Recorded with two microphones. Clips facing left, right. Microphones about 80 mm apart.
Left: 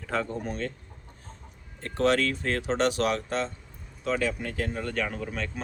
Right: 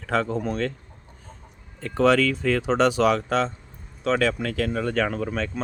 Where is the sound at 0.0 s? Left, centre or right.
Right.